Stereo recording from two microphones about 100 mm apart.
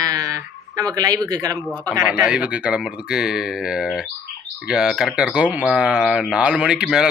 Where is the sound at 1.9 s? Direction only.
10° right (ahead or behind).